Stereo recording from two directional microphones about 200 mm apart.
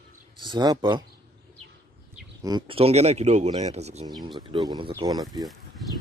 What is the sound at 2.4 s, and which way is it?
Speech, 20° right (ahead or behind).